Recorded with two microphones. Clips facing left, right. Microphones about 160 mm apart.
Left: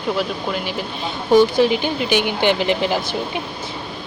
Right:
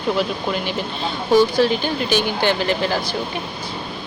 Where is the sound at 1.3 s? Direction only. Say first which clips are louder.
Left 2 dB; 15° left (ahead or behind).